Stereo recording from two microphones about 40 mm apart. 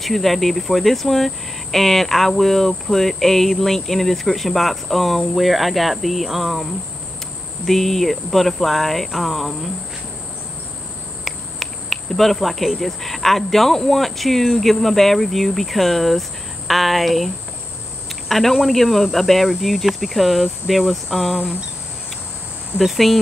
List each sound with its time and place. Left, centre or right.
0.0 s speech: centre
11.2 s speech: centre
18.3 s speech: centre
19.6 s cricket: centre
20.9 s speech: centre
21.4 s speech: right
22.8 s speech: centre